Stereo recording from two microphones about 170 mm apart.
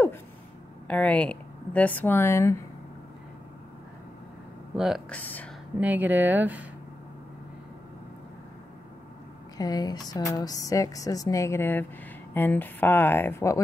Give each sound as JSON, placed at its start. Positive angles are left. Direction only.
{"t": 0.8, "sound": "speech", "side_deg": 10}
{"t": 4.7, "sound": "speech", "side_deg": 0}
{"t": 5.1, "sound": "speech", "side_deg": 10}
{"t": 5.8, "sound": "speech", "side_deg": -10}
{"t": 9.6, "sound": "speech", "side_deg": 20}